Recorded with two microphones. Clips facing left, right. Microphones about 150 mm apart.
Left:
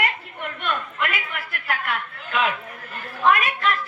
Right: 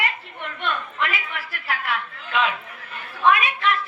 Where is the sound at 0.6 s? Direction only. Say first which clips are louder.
Right 1 dB; 50° left (ahead or behind).